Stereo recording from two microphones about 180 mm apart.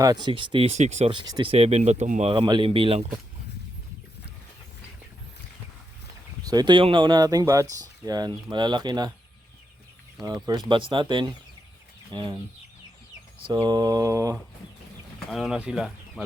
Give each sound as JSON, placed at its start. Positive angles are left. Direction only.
{"t": 0.0, "sound": "speech", "side_deg": -20}
{"t": 2.3, "sound": "speech", "side_deg": -25}
{"t": 6.4, "sound": "speech", "side_deg": -20}
{"t": 10.4, "sound": "speech", "side_deg": -25}
{"t": 13.5, "sound": "speech", "side_deg": -25}
{"t": 15.3, "sound": "speech", "side_deg": 0}